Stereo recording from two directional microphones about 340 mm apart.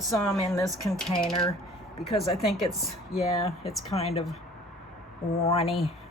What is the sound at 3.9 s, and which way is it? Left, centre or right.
Speech, centre.